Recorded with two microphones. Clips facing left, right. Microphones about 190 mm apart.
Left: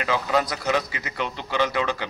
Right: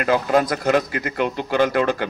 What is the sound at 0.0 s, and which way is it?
A man's voice, 50° right (ahead or behind).